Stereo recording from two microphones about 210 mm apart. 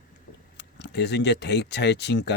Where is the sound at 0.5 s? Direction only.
55° left (ahead or behind).